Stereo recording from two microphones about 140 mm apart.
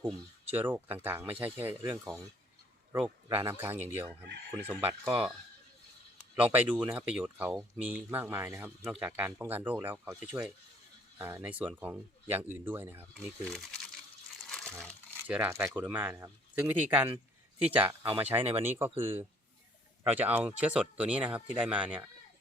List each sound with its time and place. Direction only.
0.5 s speech: 15° right (ahead or behind)
3.2 s speech: 20° right (ahead or behind)
6.3 s speech: 10° right (ahead or behind)
13.1 s speech: 5° left (ahead or behind)
14.4 s crumpling: 5° left (ahead or behind)
15.3 s speech: 15° right (ahead or behind)